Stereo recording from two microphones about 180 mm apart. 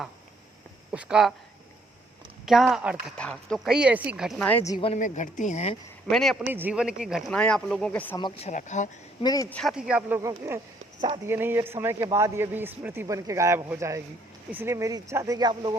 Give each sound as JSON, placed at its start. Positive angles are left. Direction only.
{"t": 0.9, "sound": "speech", "side_deg": -5}
{"t": 2.5, "sound": "speech", "side_deg": 0}
{"t": 4.4, "sound": "a woman's voice", "side_deg": 10}
{"t": 4.7, "sound": "speech", "side_deg": 30}
{"t": 4.9, "sound": "speech", "side_deg": 45}
{"t": 6.1, "sound": "speech", "side_deg": 0}
{"t": 6.5, "sound": "speech", "side_deg": -10}
{"t": 8.4, "sound": "speech", "side_deg": 40}
{"t": 9.2, "sound": "speech", "side_deg": 20}
{"t": 9.5, "sound": "speech", "side_deg": 0}